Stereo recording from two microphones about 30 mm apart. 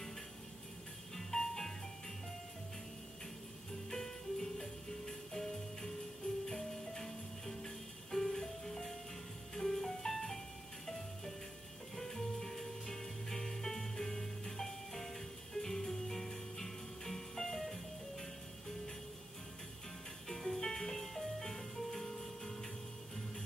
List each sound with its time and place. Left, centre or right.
1.1 s music: centre
3.9 s music: centre
11.9 s music: centre
20.2 s music: centre